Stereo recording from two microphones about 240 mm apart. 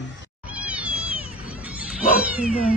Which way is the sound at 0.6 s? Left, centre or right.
Centre.